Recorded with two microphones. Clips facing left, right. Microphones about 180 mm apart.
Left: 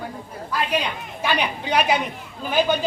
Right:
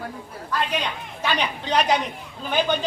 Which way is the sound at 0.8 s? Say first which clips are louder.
Left 1 dB; 10° left (ahead or behind).